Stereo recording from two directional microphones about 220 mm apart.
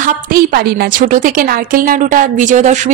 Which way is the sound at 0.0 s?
40° right (ahead or behind).